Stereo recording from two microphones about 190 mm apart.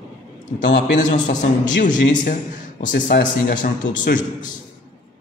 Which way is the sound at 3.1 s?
60° left (ahead or behind).